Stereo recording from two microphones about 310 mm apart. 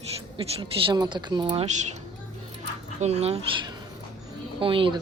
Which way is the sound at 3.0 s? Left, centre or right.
Right.